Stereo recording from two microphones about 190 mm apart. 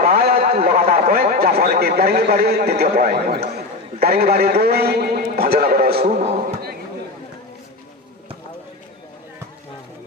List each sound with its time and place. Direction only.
0.0 s a man's voice: 50° right (ahead or behind)